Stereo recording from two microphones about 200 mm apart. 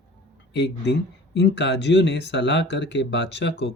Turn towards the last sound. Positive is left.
turn(degrees=60)  # may be behind; listen again after turning